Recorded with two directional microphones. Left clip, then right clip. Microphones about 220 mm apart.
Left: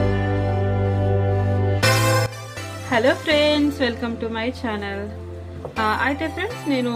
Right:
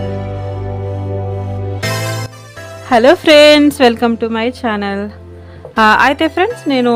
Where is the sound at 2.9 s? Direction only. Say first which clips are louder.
Right 11 dB; 55° right (ahead or behind).